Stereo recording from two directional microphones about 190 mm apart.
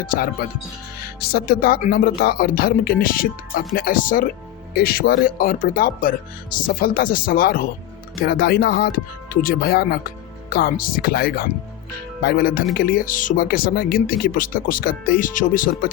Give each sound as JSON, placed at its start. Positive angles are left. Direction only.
{"t": 1.2, "sound": "speech", "side_deg": 55}